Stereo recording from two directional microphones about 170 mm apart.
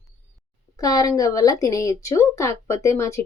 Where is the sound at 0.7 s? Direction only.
20° left (ahead or behind).